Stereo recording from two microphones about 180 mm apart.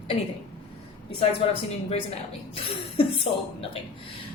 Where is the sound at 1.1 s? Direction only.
35° left (ahead or behind).